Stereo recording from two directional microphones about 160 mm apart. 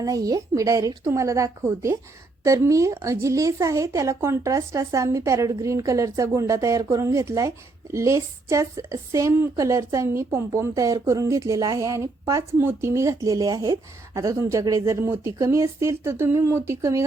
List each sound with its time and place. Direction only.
0.0 s a woman's voice: 20° right (ahead or behind)